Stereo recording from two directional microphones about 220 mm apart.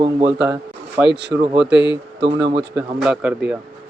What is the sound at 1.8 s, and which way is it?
Speech, 55° right (ahead or behind).